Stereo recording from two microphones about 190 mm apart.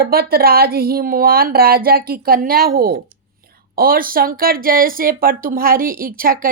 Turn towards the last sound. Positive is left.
turn(degrees=-50)  # may be behind; listen again after turning